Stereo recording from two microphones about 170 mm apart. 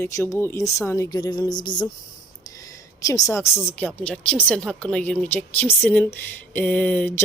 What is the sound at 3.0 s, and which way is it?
A woman's voice, 20° left (ahead or behind).